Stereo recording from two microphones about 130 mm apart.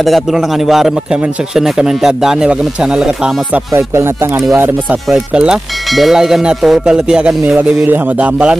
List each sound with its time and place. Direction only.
0.0 s speech: centre (ahead or behind)
3.7 s speech: 20° right (ahead or behind)